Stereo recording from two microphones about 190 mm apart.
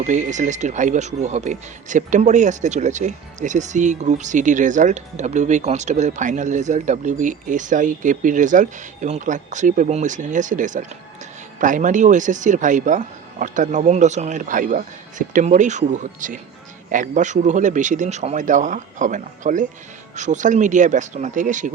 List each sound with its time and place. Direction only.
0.0 s speech: 40° right (ahead or behind)